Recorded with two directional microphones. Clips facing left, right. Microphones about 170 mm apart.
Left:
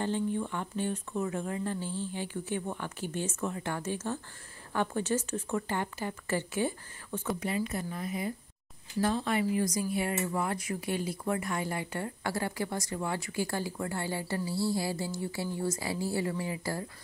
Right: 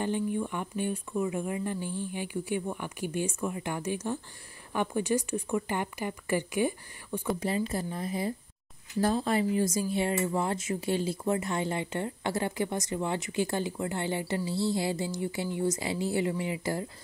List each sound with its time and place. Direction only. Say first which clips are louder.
0.0 s speech: right 1 dB; 15° right (ahead or behind)
7.3 s speech: right 2 dB; 30° right (ahead or behind)